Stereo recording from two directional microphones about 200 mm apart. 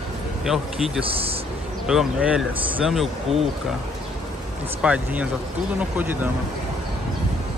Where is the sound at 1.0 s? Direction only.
30° right (ahead or behind).